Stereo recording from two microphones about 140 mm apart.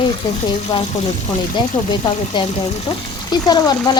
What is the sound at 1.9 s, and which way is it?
A woman's voice, 35° left (ahead or behind).